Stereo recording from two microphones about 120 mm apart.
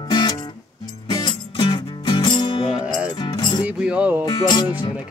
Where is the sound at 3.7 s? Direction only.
10° right (ahead or behind).